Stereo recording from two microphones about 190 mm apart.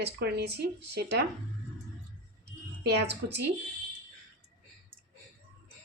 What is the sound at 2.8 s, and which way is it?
Speech, 60° right (ahead or behind).